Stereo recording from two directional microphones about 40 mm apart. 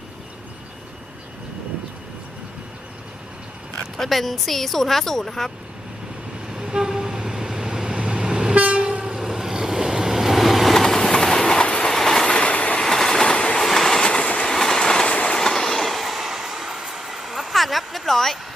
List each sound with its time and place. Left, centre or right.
3.9 s speech: centre
6.5 s vehicle: centre
8.5 s train: right
9.2 s vehicle: centre
10.8 s train: centre
11.6 s train: left
11.9 s train: centre
12.2 s train: left
12.8 s train: centre
13.2 s train: left
13.6 s train: centre
14.0 s train: left
14.4 s train: centre; by 15.4 s left
15.4 s train: centre